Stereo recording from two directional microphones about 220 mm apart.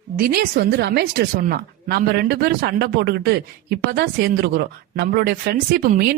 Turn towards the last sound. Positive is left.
turn(degrees=-40)  # may be behind; listen again after turning